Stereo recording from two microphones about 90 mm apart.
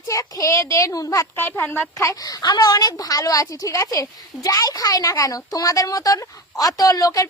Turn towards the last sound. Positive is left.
turn(degrees=40)  # may be behind; listen again after turning